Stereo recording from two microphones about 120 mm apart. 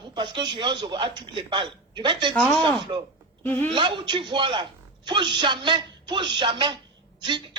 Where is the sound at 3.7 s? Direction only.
45° right (ahead or behind).